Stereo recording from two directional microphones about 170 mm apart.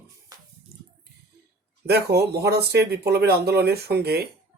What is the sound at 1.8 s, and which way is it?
Speech, 70° right (ahead or behind).